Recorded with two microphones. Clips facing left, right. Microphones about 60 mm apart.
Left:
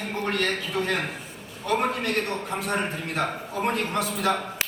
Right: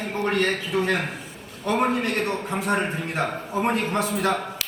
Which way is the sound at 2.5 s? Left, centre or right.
Centre.